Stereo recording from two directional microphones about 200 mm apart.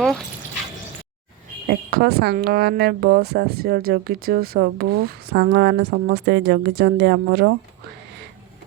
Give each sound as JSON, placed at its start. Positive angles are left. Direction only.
{"t": 1.6, "sound": "speech", "side_deg": -50}